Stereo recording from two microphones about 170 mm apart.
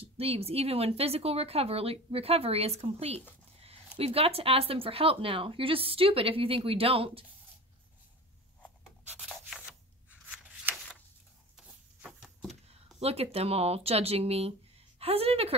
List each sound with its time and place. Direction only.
0.0 s speech: 35° right (ahead or behind)
10.3 s scissors: 10° right (ahead or behind)
11.5 s a sound: 5° right (ahead or behind)
13.0 s a woman's voice: 35° right (ahead or behind)